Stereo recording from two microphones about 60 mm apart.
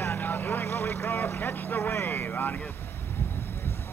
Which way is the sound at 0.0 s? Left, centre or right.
Left.